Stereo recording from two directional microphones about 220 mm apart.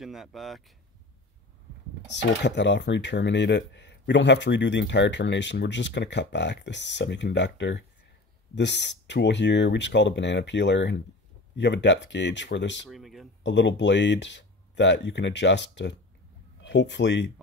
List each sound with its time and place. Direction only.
0.0 s speech: centre (ahead or behind)
2.4 s speech: 55° left (ahead or behind)
12.9 s speech: centre (ahead or behind)
13.4 s speech: 55° left (ahead or behind)